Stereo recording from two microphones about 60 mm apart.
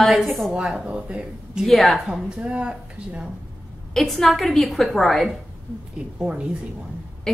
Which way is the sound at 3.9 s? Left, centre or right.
Centre.